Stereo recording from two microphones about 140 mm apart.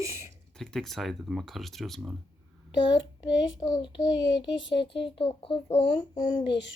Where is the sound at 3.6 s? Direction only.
30° left (ahead or behind).